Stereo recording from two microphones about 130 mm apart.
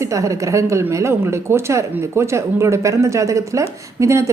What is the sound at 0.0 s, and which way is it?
Speech, 25° right (ahead or behind).